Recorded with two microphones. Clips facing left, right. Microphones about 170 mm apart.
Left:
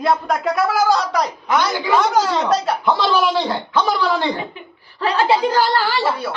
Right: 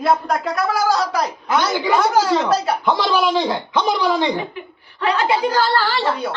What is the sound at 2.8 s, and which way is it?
Speech, 15° right (ahead or behind).